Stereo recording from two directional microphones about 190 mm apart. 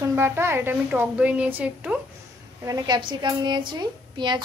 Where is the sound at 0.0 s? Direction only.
15° right (ahead or behind).